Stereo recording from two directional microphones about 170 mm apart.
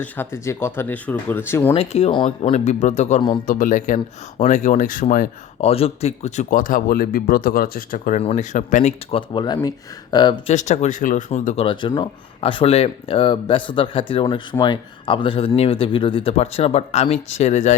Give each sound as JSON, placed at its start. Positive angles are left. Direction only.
{"t": 0.0, "sound": "speech", "side_deg": 15}
{"t": 1.7, "sound": "speech", "side_deg": 35}
{"t": 3.2, "sound": "speech", "side_deg": 30}
{"t": 3.4, "sound": "speech", "side_deg": 50}
{"t": 5.5, "sound": "speech", "side_deg": 35}
{"t": 8.2, "sound": "speech", "side_deg": 40}
{"t": 9.1, "sound": "speech", "side_deg": 25}
{"t": 10.5, "sound": "speech", "side_deg": 45}
{"t": 11.6, "sound": "speech", "side_deg": 30}